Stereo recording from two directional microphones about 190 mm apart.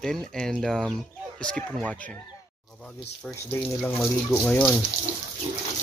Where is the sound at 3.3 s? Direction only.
10° left (ahead or behind).